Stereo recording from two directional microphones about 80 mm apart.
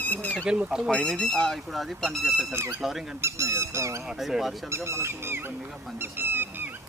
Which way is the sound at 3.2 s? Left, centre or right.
Right.